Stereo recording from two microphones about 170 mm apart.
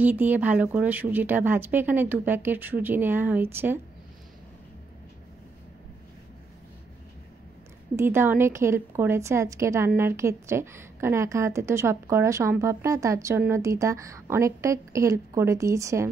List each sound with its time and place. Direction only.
0.0 s a woman's voice: 10° right (ahead or behind)
7.9 s a woman's voice: 15° right (ahead or behind)